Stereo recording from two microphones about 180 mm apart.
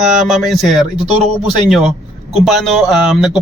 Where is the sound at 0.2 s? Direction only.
Centre (ahead or behind).